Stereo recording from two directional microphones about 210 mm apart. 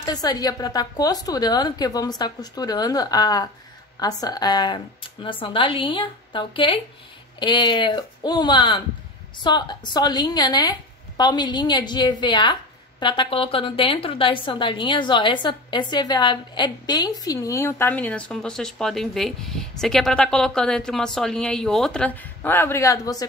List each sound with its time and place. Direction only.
0.0 s a woman's voice: 20° left (ahead or behind)